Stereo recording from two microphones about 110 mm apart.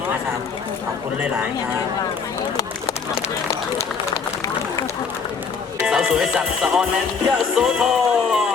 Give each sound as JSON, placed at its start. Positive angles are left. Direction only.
{"t": 5.8, "sound": "music", "side_deg": -10}
{"t": 7.5, "sound": "speech", "side_deg": -5}